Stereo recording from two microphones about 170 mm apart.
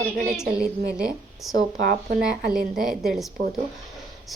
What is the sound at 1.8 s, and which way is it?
A woman's voice, 55° right (ahead or behind).